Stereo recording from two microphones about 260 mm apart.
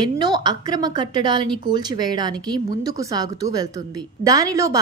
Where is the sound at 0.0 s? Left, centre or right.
Centre.